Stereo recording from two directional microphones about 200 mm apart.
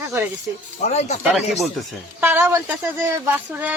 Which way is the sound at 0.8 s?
35° left (ahead or behind).